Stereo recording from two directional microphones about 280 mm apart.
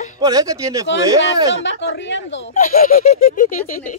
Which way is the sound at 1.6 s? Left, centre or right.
Left.